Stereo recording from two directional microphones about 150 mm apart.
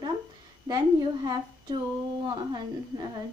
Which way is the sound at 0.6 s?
25° right (ahead or behind).